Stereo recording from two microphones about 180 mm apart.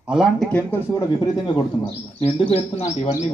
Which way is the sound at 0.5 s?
10° left (ahead or behind).